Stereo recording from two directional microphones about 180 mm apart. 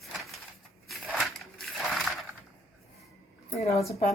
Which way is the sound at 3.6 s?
35° left (ahead or behind).